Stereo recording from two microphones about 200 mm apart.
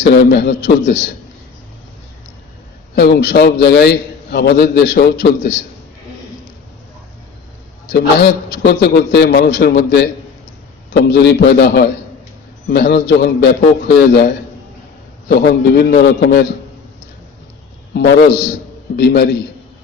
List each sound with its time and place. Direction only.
0.0 s a man's voice: 55° left (ahead or behind)
2.9 s a man's voice: 55° left (ahead or behind)
7.9 s a man's voice: 55° left (ahead or behind)
11.1 s a man's voice: 55° left (ahead or behind)
17.9 s a man's voice: 55° left (ahead or behind)